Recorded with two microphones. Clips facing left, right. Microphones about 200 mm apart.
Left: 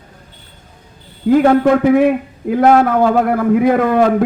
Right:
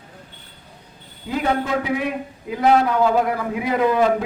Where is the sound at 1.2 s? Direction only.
50° left (ahead or behind).